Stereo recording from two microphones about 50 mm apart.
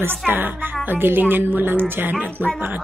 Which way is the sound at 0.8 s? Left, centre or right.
Right.